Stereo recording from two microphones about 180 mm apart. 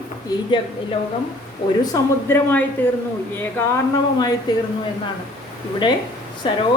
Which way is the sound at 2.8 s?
10° left (ahead or behind).